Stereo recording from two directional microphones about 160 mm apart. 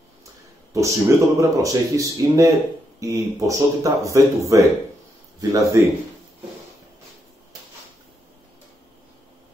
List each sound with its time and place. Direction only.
0.7 s speech: 20° right (ahead or behind)